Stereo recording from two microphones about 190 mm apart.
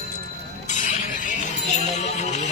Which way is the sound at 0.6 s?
40° left (ahead or behind).